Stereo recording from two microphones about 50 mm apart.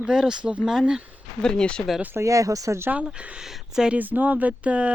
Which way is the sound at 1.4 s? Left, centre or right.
Centre.